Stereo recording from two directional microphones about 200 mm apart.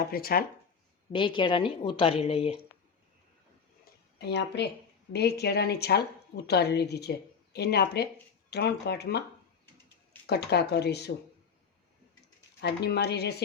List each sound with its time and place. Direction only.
0.1 s speech: 50° left (ahead or behind)
1.1 s a woman's voice: 25° left (ahead or behind)
4.2 s a woman's voice: 55° left (ahead or behind)
10.2 s a woman's voice: 55° left (ahead or behind)
12.6 s a woman's voice: 55° left (ahead or behind)